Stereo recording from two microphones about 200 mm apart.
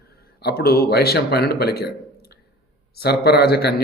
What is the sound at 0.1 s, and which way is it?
Speech, 50° left (ahead or behind).